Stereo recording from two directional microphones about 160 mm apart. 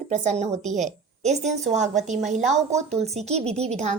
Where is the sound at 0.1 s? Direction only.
45° right (ahead or behind).